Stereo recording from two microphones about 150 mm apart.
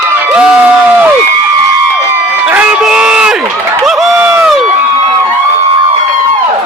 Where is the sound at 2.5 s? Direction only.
5° right (ahead or behind).